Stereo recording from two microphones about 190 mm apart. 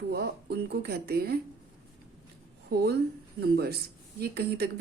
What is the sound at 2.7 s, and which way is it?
Speech, 55° right (ahead or behind).